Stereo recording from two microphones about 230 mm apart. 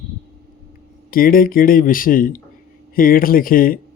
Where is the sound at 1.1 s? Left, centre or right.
Left.